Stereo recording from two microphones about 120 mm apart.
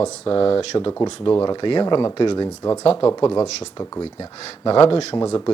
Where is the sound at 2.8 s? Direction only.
50° left (ahead or behind).